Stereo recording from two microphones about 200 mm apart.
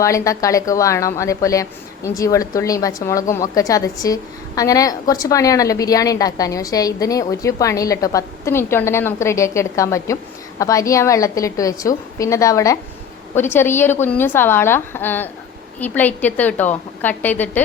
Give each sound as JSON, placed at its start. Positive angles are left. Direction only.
{"t": 0.0, "sound": "a woman's voice", "side_deg": 15}